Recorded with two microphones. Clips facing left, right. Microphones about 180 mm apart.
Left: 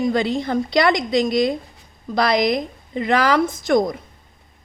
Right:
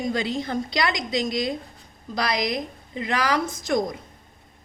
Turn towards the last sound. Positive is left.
turn(degrees=60)  # may be behind; listen again after turning